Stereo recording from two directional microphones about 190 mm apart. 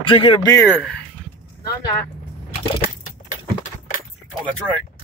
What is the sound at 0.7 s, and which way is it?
Speech, 5° left (ahead or behind).